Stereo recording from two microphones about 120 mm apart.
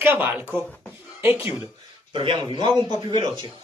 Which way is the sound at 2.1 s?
45° right (ahead or behind).